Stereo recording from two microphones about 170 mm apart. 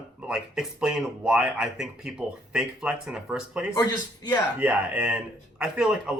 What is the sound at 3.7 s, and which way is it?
Speech, 20° left (ahead or behind).